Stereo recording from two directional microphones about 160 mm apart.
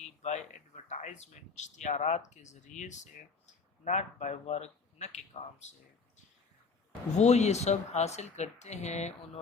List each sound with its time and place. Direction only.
0.2 s speech: 45° left (ahead or behind)
7.2 s speech: 45° left (ahead or behind)